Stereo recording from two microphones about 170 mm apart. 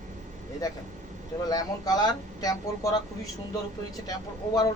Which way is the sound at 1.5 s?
20° left (ahead or behind).